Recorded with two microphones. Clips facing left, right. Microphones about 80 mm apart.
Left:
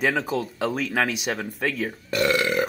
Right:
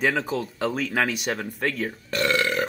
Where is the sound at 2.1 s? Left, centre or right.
Centre.